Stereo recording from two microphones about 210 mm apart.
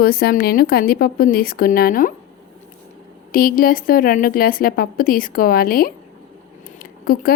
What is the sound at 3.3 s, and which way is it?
A woman's voice, 45° left (ahead or behind).